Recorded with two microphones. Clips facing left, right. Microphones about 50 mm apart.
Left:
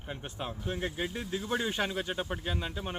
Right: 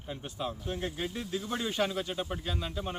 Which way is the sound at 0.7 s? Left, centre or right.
Centre.